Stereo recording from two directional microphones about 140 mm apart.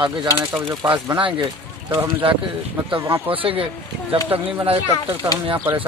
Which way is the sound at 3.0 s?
15° right (ahead or behind).